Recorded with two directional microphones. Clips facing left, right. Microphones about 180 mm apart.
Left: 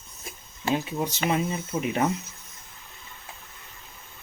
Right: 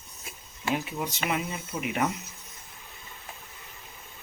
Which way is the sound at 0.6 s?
25° left (ahead or behind).